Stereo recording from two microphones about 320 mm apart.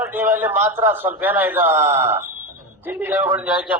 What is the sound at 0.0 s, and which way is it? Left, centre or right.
A man's voice, centre.